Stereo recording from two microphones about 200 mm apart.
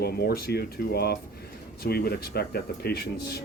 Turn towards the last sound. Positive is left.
turn(degrees=50)  # may be behind; listen again after turning